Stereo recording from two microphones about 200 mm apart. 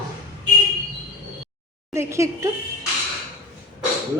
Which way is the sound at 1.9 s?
15° right (ahead or behind).